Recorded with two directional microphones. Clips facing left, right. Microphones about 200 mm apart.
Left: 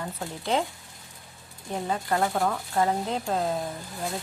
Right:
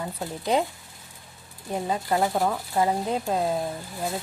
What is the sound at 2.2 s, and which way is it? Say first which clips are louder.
Speech: right 2 dB; 5° right (ahead or behind).